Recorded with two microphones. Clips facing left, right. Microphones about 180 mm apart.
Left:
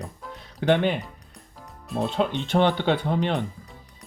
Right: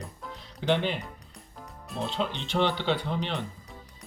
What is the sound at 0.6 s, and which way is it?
Speech, 55° left (ahead or behind).